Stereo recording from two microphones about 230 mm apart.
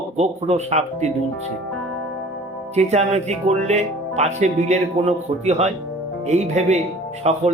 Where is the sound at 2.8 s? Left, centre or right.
Right.